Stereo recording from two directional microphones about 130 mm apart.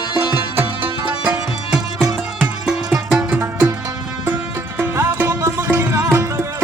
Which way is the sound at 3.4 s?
25° right (ahead or behind).